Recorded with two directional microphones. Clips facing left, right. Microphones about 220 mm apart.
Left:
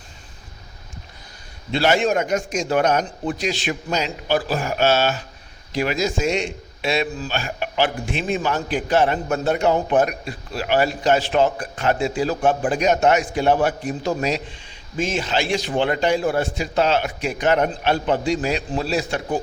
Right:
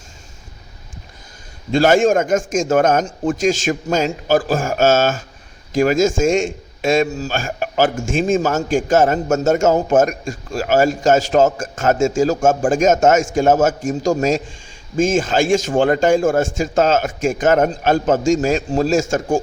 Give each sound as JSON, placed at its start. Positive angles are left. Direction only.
{"t": 1.7, "sound": "a man's voice", "side_deg": -45}